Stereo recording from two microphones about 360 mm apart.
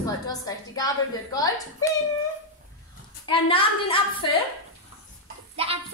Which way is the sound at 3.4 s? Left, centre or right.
Centre.